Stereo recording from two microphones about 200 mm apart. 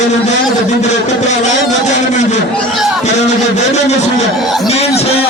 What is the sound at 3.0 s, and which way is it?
Speech, 35° left (ahead or behind).